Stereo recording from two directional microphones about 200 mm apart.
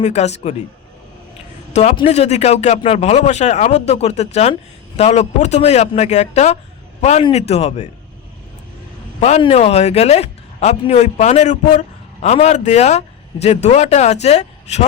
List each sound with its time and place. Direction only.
0.0 s a man's voice: 35° left (ahead or behind)
1.7 s a man's voice: 30° left (ahead or behind)
9.2 s a man's voice: 35° left (ahead or behind)